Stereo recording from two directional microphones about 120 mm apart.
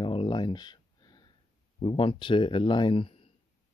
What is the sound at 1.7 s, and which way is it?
Speech, 45° left (ahead or behind).